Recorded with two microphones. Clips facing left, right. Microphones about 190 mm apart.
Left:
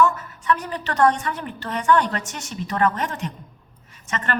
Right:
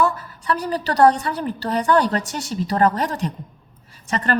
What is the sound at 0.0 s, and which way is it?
A woman's voice, 35° right (ahead or behind).